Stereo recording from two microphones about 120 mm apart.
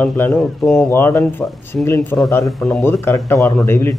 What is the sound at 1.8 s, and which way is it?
Speech, 5° left (ahead or behind).